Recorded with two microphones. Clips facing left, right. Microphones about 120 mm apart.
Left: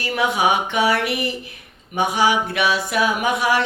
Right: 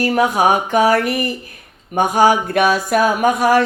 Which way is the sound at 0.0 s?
45° right (ahead or behind).